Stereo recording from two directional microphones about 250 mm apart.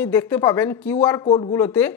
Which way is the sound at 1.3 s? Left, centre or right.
Centre.